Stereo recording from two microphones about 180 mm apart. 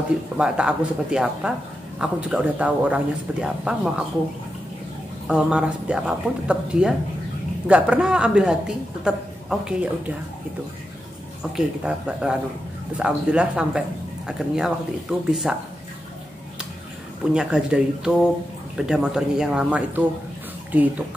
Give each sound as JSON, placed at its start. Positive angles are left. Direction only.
{"t": 0.4, "sound": "speech", "side_deg": -5}
{"t": 5.3, "sound": "speech", "side_deg": -5}
{"t": 11.5, "sound": "speech", "side_deg": -5}
{"t": 17.3, "sound": "speech", "side_deg": -5}